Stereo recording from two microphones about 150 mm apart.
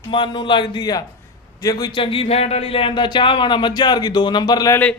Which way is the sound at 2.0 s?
35° left (ahead or behind).